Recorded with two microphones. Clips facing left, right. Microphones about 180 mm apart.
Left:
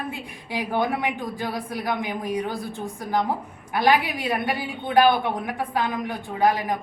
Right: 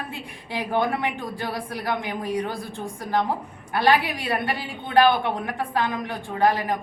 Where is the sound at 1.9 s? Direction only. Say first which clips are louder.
Even; 15° left (ahead or behind).